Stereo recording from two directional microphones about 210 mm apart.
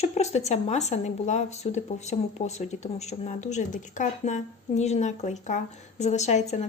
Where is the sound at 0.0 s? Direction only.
30° left (ahead or behind).